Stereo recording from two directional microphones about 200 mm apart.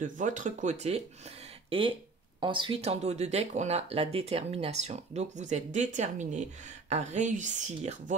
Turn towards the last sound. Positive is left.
turn(degrees=-35)  # may be behind; listen again after turning